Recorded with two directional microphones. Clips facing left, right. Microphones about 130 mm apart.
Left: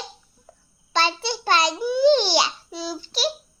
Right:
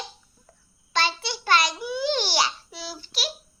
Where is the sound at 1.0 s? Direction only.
25° left (ahead or behind).